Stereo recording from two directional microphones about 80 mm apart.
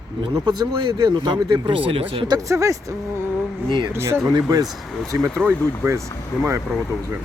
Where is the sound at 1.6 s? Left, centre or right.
Right.